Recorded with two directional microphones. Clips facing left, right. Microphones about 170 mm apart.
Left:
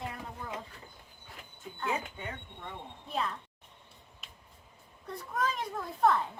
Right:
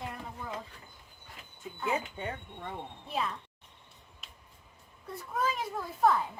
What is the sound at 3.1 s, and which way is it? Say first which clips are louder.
Speech: even; 5° right (ahead or behind).